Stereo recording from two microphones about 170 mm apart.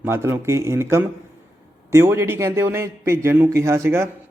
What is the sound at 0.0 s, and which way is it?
A man's voice, 15° right (ahead or behind).